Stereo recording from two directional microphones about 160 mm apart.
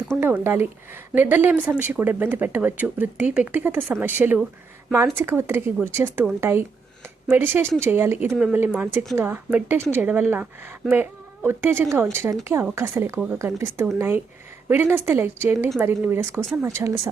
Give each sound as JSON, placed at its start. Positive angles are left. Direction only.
{"t": 0.2, "sound": "a woman's voice", "side_deg": -15}
{"t": 8.3, "sound": "speech", "side_deg": 0}
{"t": 8.5, "sound": "a woman's voice", "side_deg": -10}